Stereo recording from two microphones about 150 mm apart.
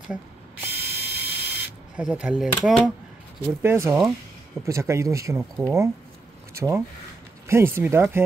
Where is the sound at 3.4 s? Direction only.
15° right (ahead or behind).